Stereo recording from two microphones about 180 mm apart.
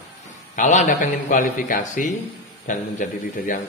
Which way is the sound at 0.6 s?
45° left (ahead or behind).